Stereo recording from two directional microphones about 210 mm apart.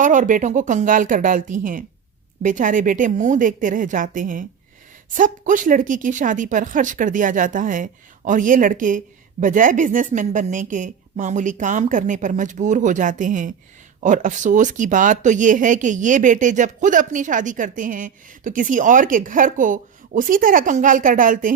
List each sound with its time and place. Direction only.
0.0 s speech: 40° right (ahead or behind)